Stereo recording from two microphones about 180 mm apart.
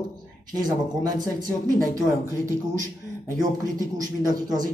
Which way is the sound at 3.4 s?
20° right (ahead or behind).